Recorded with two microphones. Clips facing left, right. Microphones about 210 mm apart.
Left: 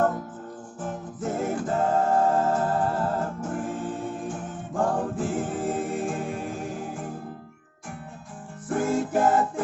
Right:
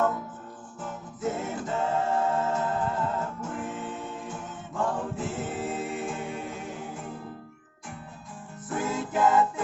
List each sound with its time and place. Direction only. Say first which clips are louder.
0.8 s music: left 2 dB; 50° left (ahead or behind)
2.8 s music: left 3 dB; 35° left (ahead or behind); by 6.7 s 50° left (ahead or behind)
8.7 s music: left 5 dB; 50° left (ahead or behind)